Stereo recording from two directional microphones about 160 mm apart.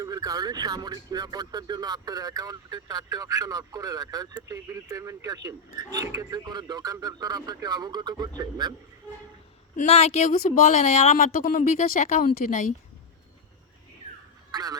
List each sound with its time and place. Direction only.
0.0 s speech: 25° right (ahead or behind)
9.7 s speech: 40° left (ahead or behind)
14.5 s speech: 25° right (ahead or behind)